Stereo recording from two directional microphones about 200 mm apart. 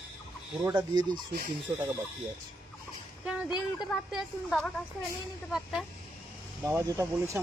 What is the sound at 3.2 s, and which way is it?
Speech, 5° right (ahead or behind).